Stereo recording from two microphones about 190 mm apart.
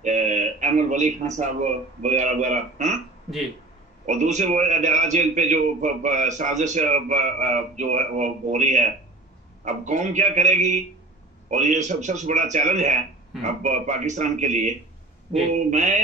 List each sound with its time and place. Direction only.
0.0 s speech: 40° right (ahead or behind)
4.0 s a man's voice: 40° right (ahead or behind)
15.7 s a man's voice: 40° right (ahead or behind)